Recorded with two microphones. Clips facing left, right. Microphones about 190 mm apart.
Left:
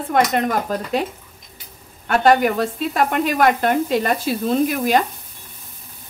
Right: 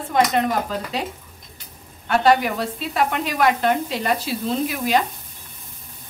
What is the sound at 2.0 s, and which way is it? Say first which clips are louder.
Speech: left 2 dB; 50° left (ahead or behind).